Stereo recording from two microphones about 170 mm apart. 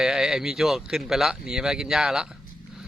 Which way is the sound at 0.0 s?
Centre (ahead or behind).